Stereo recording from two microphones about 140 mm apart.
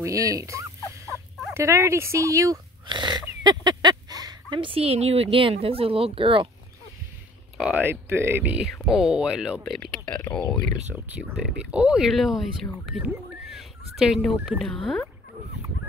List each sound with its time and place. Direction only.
0.0 s rodents: 25° right (ahead or behind)
1.5 s speech: 20° right (ahead or behind); by 6.5 s 40° right (ahead or behind)
7.5 s speech: 10° right (ahead or behind)
11.1 s speech: 10° right (ahead or behind)